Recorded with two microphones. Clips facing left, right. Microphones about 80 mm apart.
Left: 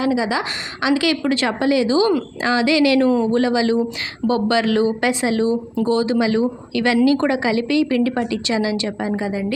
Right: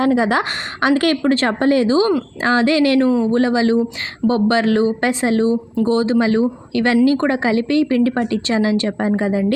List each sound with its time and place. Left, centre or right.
0.0 s speech: right